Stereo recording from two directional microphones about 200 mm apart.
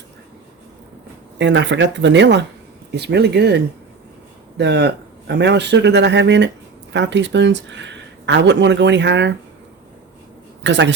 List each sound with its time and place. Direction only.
1.4 s speech: 60° right (ahead or behind)
10.6 s a woman's voice: 60° right (ahead or behind)